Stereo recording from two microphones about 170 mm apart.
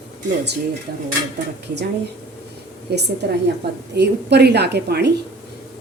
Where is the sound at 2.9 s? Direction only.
75° right (ahead or behind).